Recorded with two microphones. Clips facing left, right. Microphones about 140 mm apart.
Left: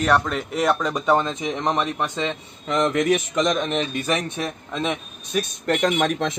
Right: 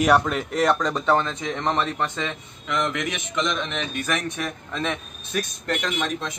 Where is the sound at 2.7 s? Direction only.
35° left (ahead or behind).